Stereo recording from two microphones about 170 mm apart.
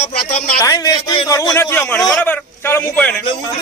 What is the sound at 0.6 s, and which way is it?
A man's voice, 20° left (ahead or behind).